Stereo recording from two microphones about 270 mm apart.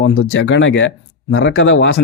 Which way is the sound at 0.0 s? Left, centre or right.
Left.